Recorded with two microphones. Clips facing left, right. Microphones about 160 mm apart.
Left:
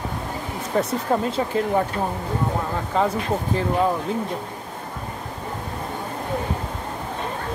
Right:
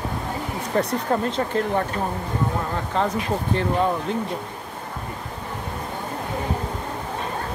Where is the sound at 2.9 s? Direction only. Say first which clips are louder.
Left 2 dB; 5° left (ahead or behind).